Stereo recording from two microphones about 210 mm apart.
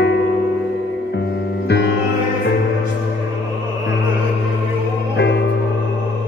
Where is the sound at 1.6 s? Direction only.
55° left (ahead or behind).